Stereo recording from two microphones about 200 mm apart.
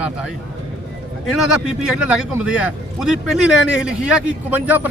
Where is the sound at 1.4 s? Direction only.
5° right (ahead or behind).